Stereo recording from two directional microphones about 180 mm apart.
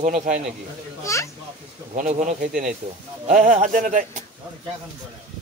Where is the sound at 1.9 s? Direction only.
45° right (ahead or behind).